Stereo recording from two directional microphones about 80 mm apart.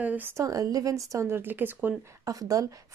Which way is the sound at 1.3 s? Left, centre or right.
Right.